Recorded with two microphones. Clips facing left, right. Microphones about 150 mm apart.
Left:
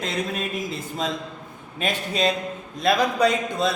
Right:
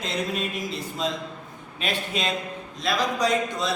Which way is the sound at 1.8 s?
40° left (ahead or behind).